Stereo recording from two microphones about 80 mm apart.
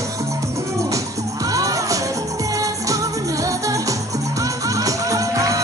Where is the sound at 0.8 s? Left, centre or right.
Right.